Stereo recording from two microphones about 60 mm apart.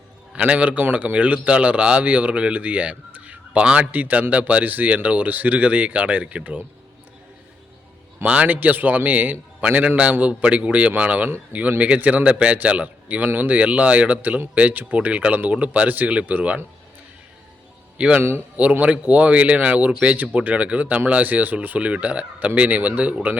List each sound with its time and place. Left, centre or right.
0.3 s speech: centre
8.2 s speech: right
17.9 s speech: centre
18.2 s speech: right
18.5 s speech: right